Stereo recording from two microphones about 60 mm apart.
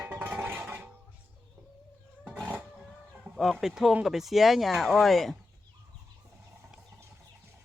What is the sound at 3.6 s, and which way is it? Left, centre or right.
Speech, centre.